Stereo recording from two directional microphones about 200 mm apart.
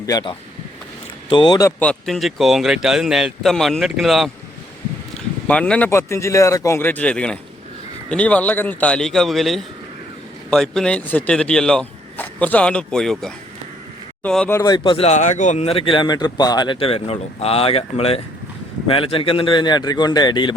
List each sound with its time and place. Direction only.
0.0 s speech: 20° left (ahead or behind)
1.8 s speech: 5° left (ahead or behind)
5.5 s speech: 5° left (ahead or behind)
14.8 s speech: 30° left (ahead or behind)